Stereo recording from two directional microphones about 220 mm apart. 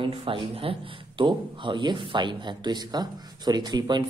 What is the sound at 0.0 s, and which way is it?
Speech, 25° right (ahead or behind).